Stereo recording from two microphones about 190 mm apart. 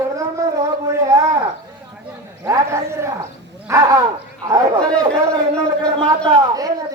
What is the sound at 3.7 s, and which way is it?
Dog, 20° right (ahead or behind).